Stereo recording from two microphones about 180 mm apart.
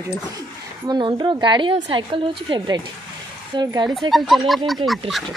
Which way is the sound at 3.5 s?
25° right (ahead or behind).